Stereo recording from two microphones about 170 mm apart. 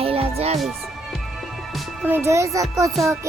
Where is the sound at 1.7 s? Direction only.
5° right (ahead or behind).